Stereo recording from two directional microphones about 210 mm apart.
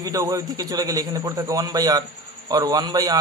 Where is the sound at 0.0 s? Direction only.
15° right (ahead or behind).